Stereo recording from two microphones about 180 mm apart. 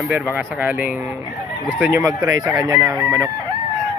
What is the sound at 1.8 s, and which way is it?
Speech, 15° right (ahead or behind).